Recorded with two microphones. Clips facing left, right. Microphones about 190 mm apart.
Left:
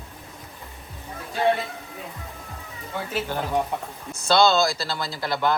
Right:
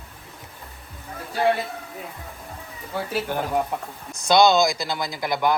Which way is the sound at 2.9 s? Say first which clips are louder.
Right 2 dB; 10° right (ahead or behind).